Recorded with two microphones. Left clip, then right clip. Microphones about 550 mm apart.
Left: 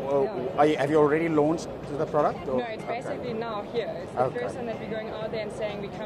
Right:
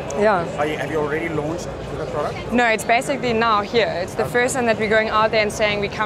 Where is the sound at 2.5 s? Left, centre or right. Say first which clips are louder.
Right 13 dB; right.